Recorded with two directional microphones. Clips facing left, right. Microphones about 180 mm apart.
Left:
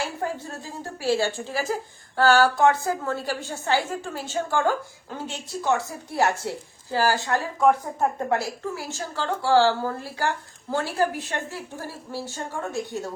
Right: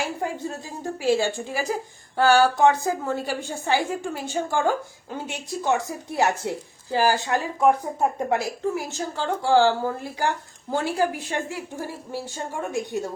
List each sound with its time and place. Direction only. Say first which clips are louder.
0.9 s speech: right 2 dB; 15° right (ahead or behind)